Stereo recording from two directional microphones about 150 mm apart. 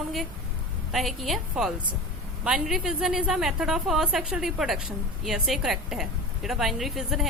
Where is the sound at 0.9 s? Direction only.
Centre (ahead or behind).